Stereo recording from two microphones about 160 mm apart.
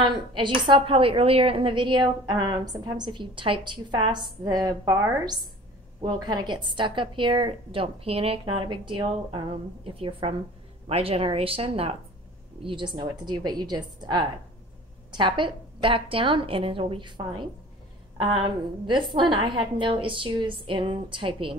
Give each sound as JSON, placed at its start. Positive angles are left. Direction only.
{"t": 0.0, "sound": "a woman's voice", "side_deg": -30}
{"t": 5.9, "sound": "a woman's voice", "side_deg": -30}